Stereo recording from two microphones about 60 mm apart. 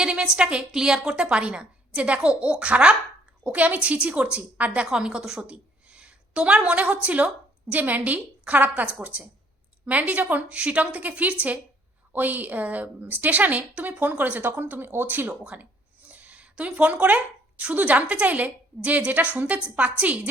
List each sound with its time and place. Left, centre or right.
0.0 s a woman's voice: centre
4.9 s a woman's voice: centre